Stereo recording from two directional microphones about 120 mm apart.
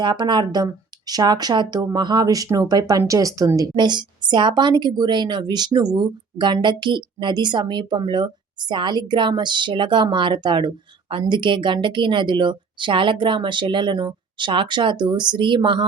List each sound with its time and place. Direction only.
0.0 s a woman's voice: 40° right (ahead or behind)